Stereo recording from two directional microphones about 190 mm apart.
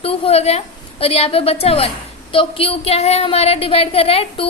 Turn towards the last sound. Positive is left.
turn(degrees=30)  # may be behind; listen again after turning